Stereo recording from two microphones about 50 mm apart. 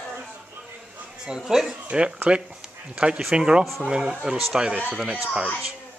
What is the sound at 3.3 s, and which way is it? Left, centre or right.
Speech, centre.